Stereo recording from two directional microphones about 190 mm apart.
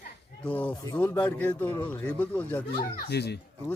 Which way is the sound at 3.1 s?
60° left (ahead or behind).